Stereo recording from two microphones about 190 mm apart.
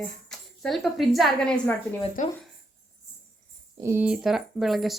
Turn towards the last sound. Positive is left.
turn(degrees=0)  # may be behind; listen again after turning